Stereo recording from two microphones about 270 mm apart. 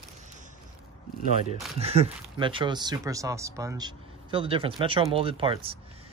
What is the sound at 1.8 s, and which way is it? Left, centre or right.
Speech, right.